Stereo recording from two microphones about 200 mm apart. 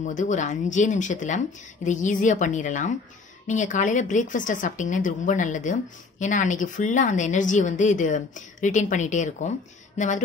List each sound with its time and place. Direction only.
0.0 s a woman's voice: 40° left (ahead or behind)